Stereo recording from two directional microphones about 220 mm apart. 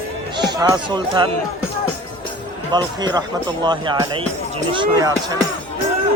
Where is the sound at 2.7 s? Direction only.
20° right (ahead or behind).